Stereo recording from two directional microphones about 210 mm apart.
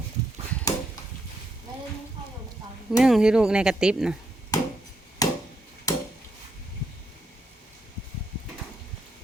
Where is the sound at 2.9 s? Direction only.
Centre (ahead or behind).